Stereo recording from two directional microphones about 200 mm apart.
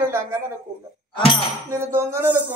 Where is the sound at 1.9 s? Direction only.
10° right (ahead or behind).